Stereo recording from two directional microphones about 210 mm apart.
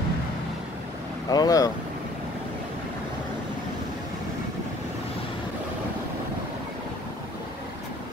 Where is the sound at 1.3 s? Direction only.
15° left (ahead or behind).